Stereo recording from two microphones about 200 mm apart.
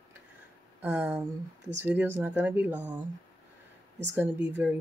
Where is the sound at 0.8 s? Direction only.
10° right (ahead or behind).